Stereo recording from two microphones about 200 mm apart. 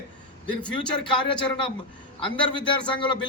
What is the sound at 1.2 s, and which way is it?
A man's voice, 25° left (ahead or behind).